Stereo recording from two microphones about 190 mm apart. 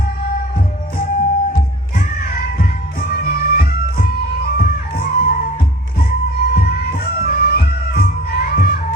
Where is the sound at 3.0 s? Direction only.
55° left (ahead or behind).